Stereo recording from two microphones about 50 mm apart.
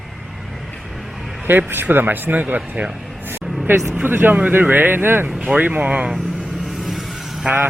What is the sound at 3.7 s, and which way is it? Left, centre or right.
A man's voice, right.